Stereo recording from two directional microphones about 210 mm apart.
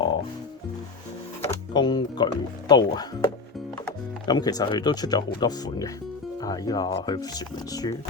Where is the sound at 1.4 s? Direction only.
20° left (ahead or behind).